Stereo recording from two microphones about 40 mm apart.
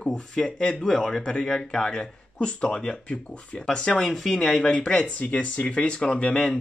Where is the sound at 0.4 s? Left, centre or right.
Left.